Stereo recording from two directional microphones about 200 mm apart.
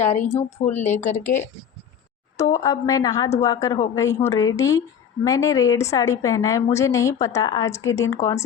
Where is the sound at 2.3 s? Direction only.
15° left (ahead or behind).